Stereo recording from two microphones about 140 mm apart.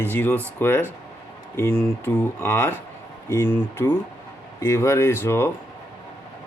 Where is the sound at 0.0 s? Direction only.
15° left (ahead or behind).